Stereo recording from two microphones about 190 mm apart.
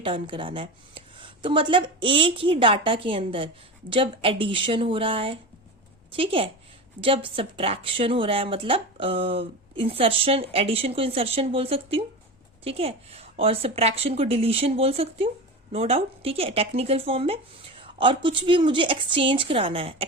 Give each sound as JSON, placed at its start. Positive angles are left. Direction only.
{"t": 0.0, "sound": "a woman's voice", "side_deg": -25}